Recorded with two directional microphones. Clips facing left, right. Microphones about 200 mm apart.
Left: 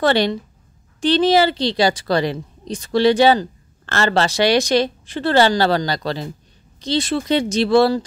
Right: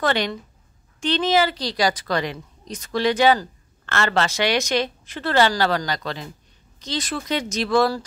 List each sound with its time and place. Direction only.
0.0 s a woman's voice: 30° left (ahead or behind)